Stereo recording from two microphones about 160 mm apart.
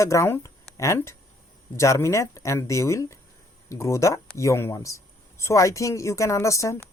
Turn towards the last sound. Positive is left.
turn(degrees=20)  # may be behind; listen again after turning